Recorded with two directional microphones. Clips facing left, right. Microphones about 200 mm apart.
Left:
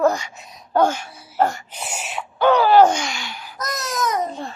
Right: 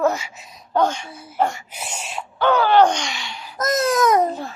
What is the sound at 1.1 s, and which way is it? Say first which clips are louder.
Baby cry: right 5 dB; 55° right (ahead or behind).